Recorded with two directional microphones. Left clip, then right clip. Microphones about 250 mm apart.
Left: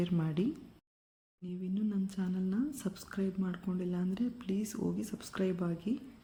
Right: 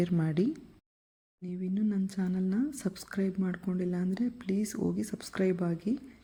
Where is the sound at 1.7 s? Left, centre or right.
Right.